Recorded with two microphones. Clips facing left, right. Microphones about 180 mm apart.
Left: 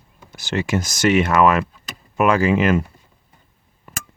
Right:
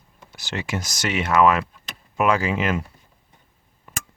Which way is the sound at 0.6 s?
50° left (ahead or behind).